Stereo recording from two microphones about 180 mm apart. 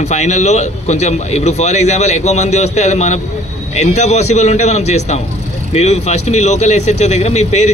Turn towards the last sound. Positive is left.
turn(degrees=40)  # may be behind; listen again after turning